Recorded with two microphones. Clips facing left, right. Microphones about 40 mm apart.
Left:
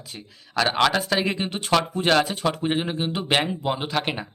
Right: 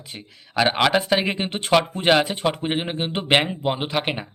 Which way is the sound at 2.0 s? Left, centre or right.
Right.